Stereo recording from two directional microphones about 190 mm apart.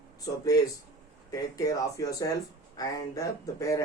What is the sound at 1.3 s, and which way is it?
Speech, 20° left (ahead or behind).